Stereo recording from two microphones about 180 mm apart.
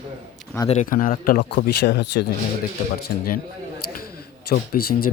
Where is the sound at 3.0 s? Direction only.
55° left (ahead or behind).